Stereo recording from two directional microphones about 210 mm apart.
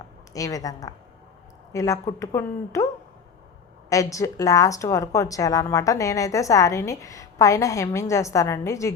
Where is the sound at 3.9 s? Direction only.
15° left (ahead or behind).